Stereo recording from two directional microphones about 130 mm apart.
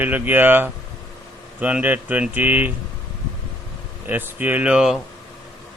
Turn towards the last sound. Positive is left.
turn(degrees=-5)  # may be behind; listen again after turning